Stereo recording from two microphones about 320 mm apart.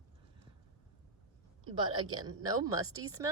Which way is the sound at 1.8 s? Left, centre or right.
Centre.